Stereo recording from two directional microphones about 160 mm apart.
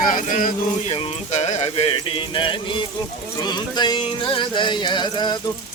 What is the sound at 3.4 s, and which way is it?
Speech, 25° left (ahead or behind).